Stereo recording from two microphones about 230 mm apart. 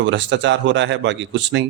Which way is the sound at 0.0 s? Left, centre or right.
Right.